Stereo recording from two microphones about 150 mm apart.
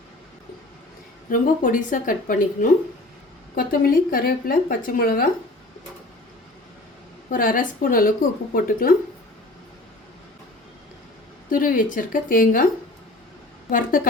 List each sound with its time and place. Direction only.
1.3 s a woman's voice: 60° left (ahead or behind)
7.3 s speech: 65° left (ahead or behind)
11.4 s a woman's voice: 65° left (ahead or behind)
13.7 s a woman's voice: 65° left (ahead or behind)